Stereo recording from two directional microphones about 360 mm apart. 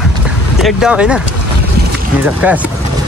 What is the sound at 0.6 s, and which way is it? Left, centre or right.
Speech, centre.